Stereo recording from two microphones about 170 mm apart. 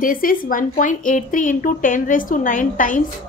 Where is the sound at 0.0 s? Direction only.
55° left (ahead or behind).